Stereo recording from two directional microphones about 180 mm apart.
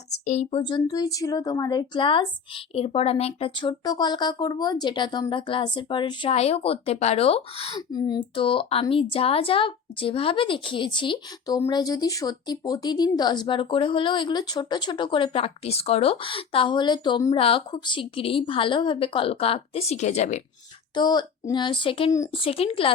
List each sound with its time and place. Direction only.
0.3 s a woman's voice: 40° left (ahead or behind)
0.6 s a woman's voice: 25° left (ahead or behind)
7.8 s a woman's voice: 20° left (ahead or behind); by 20.4 s 40° left (ahead or behind)
20.9 s a woman's voice: 25° left (ahead or behind)